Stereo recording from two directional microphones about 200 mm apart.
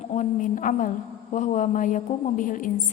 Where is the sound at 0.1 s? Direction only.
40° left (ahead or behind).